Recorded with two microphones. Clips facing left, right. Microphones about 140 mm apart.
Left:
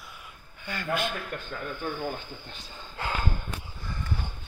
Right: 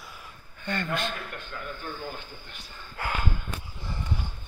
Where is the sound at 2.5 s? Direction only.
25° left (ahead or behind).